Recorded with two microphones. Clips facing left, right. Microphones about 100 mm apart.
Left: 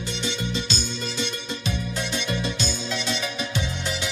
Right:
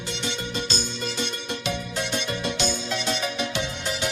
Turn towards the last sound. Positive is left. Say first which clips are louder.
# right 1 dB
turn(degrees=-45)  # may be behind; listen again after turning